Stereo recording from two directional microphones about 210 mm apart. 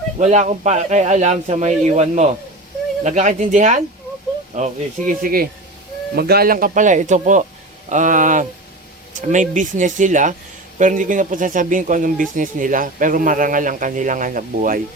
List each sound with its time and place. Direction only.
0.2 s a man's voice: 35° right (ahead or behind)